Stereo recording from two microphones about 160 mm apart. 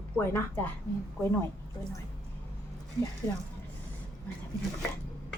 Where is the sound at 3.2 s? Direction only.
15° left (ahead or behind).